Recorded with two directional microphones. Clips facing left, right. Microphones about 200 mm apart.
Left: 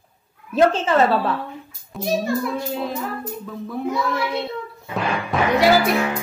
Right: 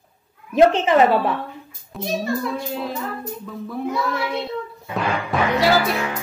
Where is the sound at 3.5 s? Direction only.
Centre (ahead or behind).